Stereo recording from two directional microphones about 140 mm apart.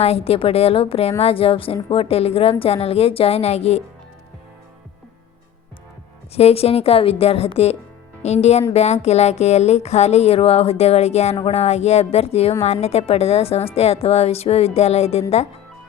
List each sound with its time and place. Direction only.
0.0 s a woman's voice: 45° left (ahead or behind)
6.3 s a woman's voice: 45° left (ahead or behind)